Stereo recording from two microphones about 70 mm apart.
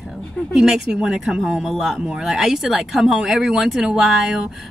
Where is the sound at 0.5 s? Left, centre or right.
Centre.